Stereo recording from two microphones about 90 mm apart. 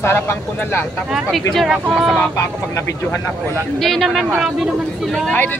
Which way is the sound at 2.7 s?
25° left (ahead or behind).